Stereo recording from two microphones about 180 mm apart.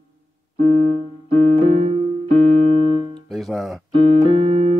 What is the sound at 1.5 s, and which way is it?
Keyboard, 40° right (ahead or behind).